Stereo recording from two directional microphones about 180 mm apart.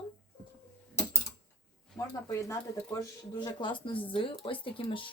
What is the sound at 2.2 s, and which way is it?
Speech, 20° left (ahead or behind).